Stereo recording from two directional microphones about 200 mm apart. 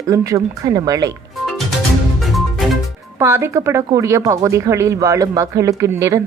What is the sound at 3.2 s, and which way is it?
Speech, 15° right (ahead or behind).